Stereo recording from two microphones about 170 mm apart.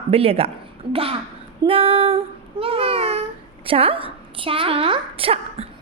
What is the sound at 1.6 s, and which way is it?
Child singing, 35° right (ahead or behind).